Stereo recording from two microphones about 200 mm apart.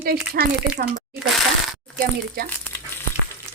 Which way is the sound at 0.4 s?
50° right (ahead or behind).